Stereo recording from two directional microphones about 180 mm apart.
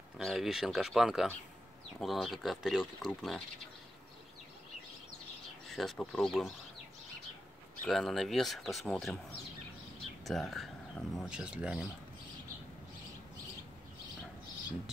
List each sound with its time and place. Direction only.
0.2 s speech: centre (ahead or behind)
5.7 s speech: centre (ahead or behind)
7.8 s speech: centre (ahead or behind)
10.2 s speech: centre (ahead or behind)